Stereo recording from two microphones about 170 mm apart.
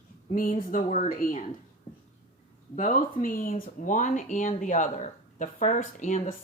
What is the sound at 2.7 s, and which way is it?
Speech, 50° left (ahead or behind).